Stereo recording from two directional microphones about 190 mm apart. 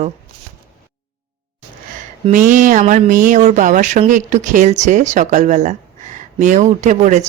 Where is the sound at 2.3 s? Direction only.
40° right (ahead or behind).